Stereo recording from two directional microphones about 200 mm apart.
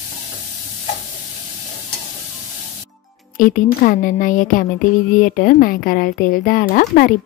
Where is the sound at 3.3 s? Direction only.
40° left (ahead or behind).